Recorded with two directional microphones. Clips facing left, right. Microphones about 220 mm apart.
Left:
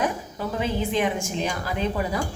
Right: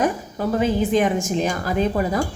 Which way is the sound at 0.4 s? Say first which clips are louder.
Right 7 dB; 45° right (ahead or behind).